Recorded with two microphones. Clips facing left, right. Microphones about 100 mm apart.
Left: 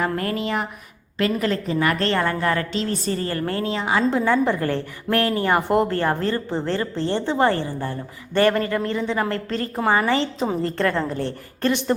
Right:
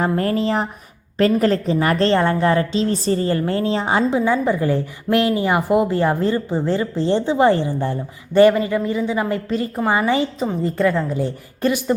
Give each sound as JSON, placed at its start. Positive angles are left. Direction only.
{"t": 0.0, "sound": "a woman's voice", "side_deg": -30}
{"t": 4.1, "sound": "a woman's voice", "side_deg": -5}
{"t": 5.9, "sound": "a woman's voice", "side_deg": -15}